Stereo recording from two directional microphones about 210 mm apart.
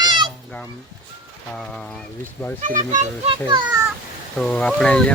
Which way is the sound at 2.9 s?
35° right (ahead or behind).